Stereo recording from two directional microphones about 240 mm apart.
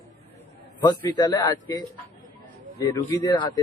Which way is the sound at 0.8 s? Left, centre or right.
Centre.